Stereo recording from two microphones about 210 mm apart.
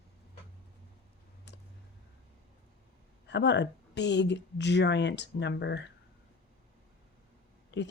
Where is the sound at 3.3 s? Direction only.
55° left (ahead or behind).